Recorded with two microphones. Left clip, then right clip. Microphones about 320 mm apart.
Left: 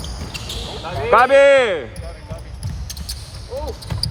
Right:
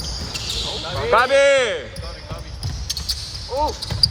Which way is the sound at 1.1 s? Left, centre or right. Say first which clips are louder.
Left 4 dB; centre.